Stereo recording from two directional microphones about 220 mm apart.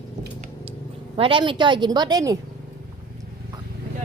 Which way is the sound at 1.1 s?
25° right (ahead or behind).